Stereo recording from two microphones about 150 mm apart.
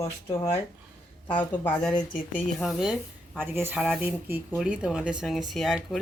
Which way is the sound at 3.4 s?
15° right (ahead or behind).